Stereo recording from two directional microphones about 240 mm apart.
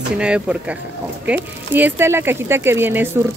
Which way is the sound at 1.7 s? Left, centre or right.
Centre.